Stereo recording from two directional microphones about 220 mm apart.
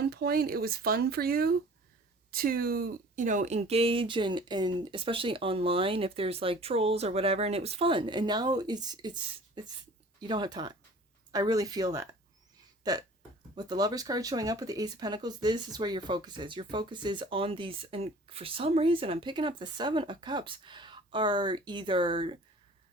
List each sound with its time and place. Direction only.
0.0 s speech: 45° right (ahead or behind); by 12.0 s 15° right (ahead or behind)
12.8 s a sound: 15° right (ahead or behind)
13.6 s speech: 20° right (ahead or behind)